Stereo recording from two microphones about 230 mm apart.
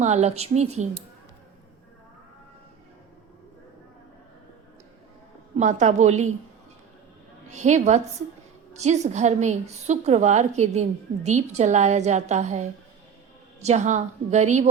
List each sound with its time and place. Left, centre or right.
0.0 s a woman's voice: right
5.5 s a woman's voice: right
7.5 s a woman's voice: right